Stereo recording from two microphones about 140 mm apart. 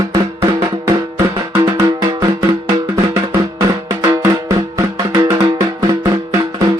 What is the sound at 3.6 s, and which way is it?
Music, 25° right (ahead or behind).